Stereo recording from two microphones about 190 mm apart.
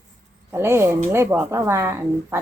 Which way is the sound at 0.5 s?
15° right (ahead or behind).